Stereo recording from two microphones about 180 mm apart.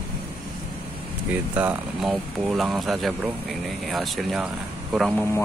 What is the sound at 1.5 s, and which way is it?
Speech, 5° right (ahead or behind).